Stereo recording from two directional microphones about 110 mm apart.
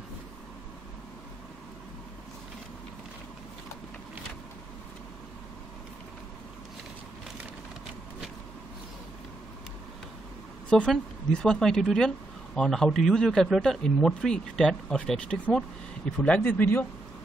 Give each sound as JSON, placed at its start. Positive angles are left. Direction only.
{"t": 10.7, "sound": "a man's voice", "side_deg": 5}